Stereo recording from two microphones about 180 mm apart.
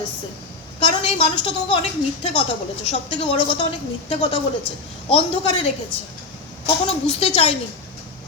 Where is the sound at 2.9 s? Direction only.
30° left (ahead or behind).